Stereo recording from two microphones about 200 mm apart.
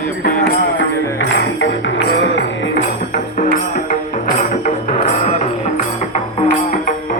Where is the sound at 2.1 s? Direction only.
70° left (ahead or behind).